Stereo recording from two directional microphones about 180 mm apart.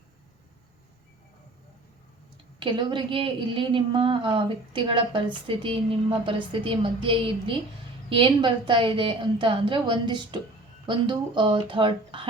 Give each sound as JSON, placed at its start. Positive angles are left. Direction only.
{"t": 2.6, "sound": "a woman's voice", "side_deg": -25}